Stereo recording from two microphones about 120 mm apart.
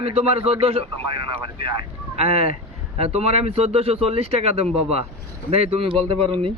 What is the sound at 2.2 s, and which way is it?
Speech, 60° right (ahead or behind).